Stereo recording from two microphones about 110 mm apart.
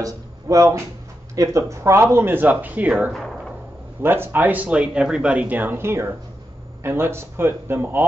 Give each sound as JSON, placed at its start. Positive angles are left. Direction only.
{"t": 0.0, "sound": "speech", "side_deg": -30}
{"t": 3.1, "sound": "speech", "side_deg": 0}
{"t": 4.0, "sound": "speech", "side_deg": -20}